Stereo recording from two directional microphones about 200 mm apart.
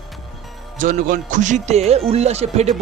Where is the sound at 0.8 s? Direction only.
40° right (ahead or behind).